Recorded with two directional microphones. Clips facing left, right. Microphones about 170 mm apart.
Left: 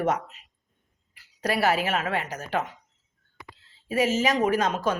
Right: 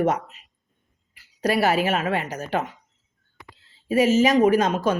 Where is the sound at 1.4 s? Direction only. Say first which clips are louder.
Right 4 dB; 15° right (ahead or behind).